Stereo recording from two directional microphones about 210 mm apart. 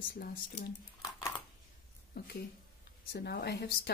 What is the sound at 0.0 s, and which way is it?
Speech, 45° left (ahead or behind).